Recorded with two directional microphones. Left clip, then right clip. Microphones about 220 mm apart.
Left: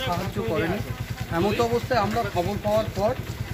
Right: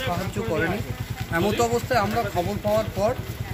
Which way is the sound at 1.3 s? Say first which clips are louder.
Right 1 dB; 20° right (ahead or behind).